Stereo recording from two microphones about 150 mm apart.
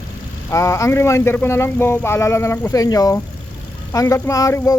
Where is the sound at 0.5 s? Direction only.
20° left (ahead or behind).